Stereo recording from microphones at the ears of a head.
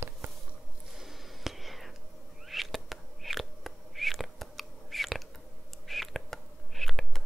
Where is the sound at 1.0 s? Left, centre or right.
Centre.